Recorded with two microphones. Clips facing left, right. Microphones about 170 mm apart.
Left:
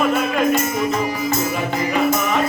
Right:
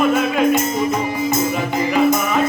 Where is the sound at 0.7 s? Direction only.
25° right (ahead or behind).